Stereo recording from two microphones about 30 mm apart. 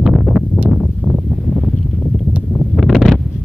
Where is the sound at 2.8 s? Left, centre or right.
Centre.